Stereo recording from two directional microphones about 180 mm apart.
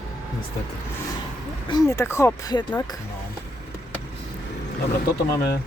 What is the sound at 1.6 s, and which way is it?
Speech, 20° left (ahead or behind).